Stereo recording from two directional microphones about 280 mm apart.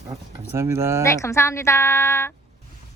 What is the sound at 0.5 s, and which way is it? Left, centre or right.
Speech, centre.